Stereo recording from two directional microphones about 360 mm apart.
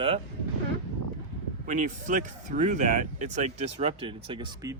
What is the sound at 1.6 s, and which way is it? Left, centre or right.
Speech, right.